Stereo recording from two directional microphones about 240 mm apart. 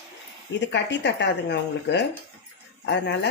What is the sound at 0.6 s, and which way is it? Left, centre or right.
Speech, left.